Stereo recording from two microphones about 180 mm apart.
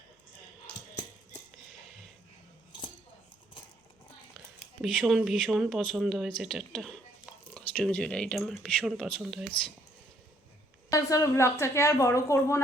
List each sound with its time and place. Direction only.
4.4 s speech: centre (ahead or behind)
10.9 s a woman's voice: 20° left (ahead or behind)